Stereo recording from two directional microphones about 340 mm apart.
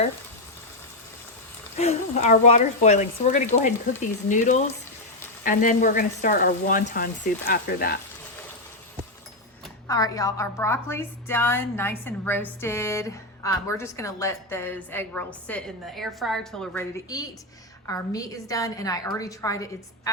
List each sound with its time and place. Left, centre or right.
1.7 s speech: centre
9.8 s a woman's voice: centre